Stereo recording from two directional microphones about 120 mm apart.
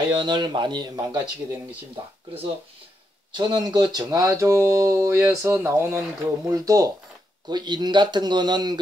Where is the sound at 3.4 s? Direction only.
35° right (ahead or behind).